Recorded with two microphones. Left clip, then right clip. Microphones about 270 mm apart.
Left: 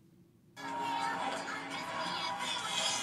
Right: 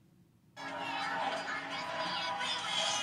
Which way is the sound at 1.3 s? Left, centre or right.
Right.